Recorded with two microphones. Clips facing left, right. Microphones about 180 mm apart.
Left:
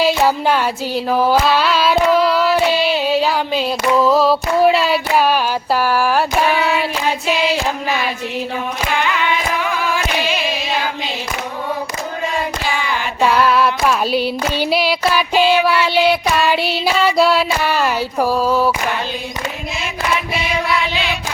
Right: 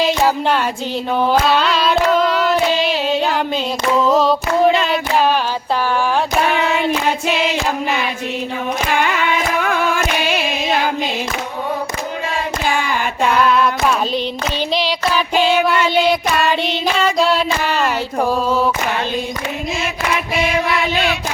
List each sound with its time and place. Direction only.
0.0 s carnatic music: 5° left (ahead or behind)
4.1 s female singing: 5° left (ahead or behind)
5.9 s carnatic music: 5° left (ahead or behind)
9.9 s a sound: 50° right (ahead or behind)
14.7 s child singing: 10° left (ahead or behind)